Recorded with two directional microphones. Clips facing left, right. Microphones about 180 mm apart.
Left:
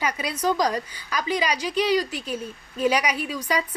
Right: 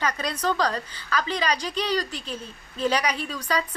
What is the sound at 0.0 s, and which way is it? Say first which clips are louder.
A woman's voice: left 1 dB; 10° left (ahead or behind).